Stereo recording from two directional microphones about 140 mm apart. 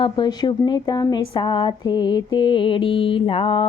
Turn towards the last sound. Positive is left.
turn(degrees=35)  # may be behind; listen again after turning